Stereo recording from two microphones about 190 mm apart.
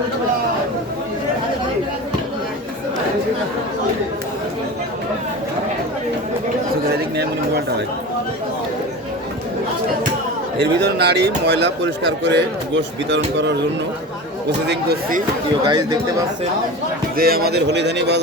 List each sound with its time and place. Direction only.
6.8 s a sound: 60° right (ahead or behind)
10.6 s speech: 60° right (ahead or behind)
14.7 s speech: 55° right (ahead or behind)
15.6 s speech: 20° right (ahead or behind)
17.2 s speech: 55° right (ahead or behind)